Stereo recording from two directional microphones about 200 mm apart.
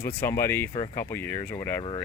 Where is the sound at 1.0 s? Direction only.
10° left (ahead or behind).